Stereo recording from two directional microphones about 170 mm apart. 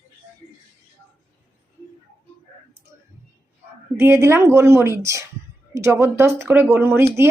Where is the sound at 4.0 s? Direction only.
15° right (ahead or behind).